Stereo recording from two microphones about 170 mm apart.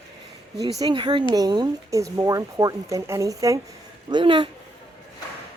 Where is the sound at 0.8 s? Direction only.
30° right (ahead or behind).